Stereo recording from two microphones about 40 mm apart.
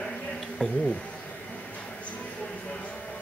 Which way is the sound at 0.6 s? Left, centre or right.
Centre.